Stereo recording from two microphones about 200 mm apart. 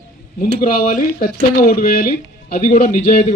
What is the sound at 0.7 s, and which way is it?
Speech, 40° left (ahead or behind).